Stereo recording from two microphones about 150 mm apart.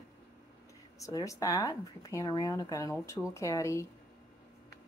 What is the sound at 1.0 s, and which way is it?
Speech, 20° left (ahead or behind).